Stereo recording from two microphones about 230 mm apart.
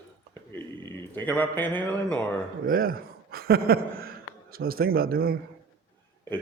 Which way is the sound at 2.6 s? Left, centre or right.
Right.